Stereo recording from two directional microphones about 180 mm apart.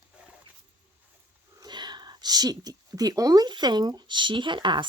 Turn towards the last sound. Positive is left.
turn(degrees=-25)  # may be behind; listen again after turning